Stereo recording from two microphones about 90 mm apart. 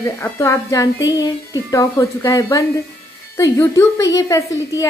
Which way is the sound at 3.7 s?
40° left (ahead or behind).